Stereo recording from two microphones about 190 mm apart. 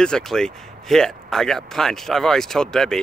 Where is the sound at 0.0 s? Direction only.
5° left (ahead or behind).